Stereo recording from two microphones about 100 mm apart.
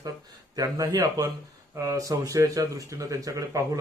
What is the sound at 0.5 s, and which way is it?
A man's voice, 35° right (ahead or behind).